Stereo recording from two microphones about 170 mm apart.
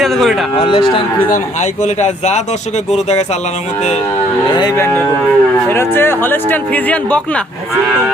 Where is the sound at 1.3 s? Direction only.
45° left (ahead or behind).